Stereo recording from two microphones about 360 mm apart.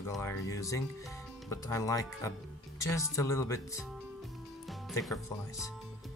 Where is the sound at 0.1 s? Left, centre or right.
Centre.